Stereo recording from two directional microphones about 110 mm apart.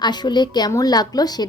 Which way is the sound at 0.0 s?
40° left (ahead or behind).